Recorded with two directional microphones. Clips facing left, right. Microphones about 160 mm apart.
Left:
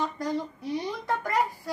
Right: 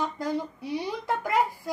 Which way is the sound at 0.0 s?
10° right (ahead or behind).